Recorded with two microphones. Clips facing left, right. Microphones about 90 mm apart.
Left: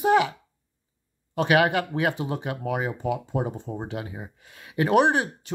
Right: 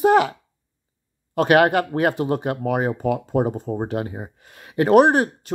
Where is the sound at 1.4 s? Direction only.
45° right (ahead or behind).